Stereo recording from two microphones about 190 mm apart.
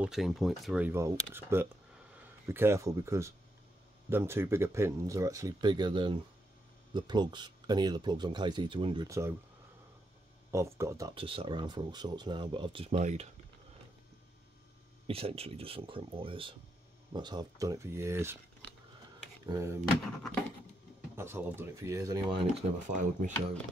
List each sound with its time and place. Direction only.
0.0 s speech: centre (ahead or behind); by 9.3 s 15° right (ahead or behind)
10.5 s speech: 15° right (ahead or behind)
11.1 s speech: 30° right (ahead or behind)
15.0 s speech: 30° right (ahead or behind); by 18.4 s 15° right (ahead or behind)
19.4 s speech: 15° right (ahead or behind)
21.2 s speech: 10° right (ahead or behind)
22.6 s speech: 40° right (ahead or behind)